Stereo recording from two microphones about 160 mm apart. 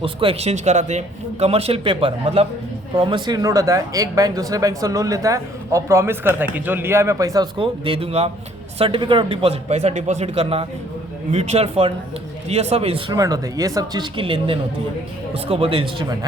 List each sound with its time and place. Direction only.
0.0 s speech: 35° right (ahead or behind)
0.5 s speech: 45° right (ahead or behind); by 7.4 s 20° right (ahead or behind)
7.6 s speech: 35° right (ahead or behind)
13.1 s speech: 20° right (ahead or behind)